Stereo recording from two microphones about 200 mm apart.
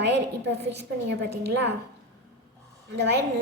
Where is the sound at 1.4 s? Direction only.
60° right (ahead or behind).